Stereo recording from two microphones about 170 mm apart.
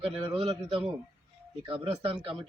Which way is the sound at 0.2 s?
35° right (ahead or behind).